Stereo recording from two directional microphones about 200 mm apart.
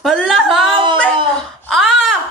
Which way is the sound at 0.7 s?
25° right (ahead or behind).